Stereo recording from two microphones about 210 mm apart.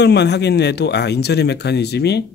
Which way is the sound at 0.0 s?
55° left (ahead or behind).